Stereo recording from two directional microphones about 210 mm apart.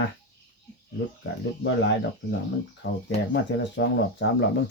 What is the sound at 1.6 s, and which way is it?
Speech, 55° left (ahead or behind).